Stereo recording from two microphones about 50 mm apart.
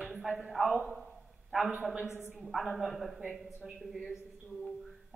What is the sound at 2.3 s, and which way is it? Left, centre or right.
A woman's voice, centre.